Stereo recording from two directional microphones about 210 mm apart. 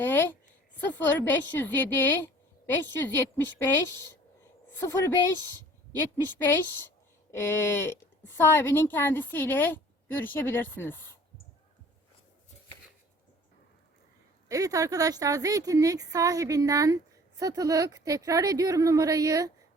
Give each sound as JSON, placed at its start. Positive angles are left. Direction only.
{"t": 0.0, "sound": "a woman's voice", "side_deg": 10}
{"t": 6.2, "sound": "speech", "side_deg": 10}
{"t": 14.4, "sound": "speech", "side_deg": -15}